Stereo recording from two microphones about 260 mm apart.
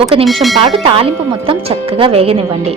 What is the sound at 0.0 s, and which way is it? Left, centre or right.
A woman's voice, right.